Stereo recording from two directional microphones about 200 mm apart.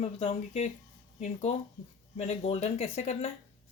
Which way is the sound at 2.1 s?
30° left (ahead or behind).